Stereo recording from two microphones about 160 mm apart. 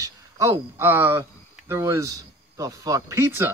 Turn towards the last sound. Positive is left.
turn(degrees=-15)  # may be behind; listen again after turning